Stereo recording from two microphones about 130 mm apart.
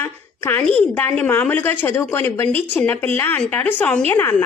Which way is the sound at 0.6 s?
10° left (ahead or behind).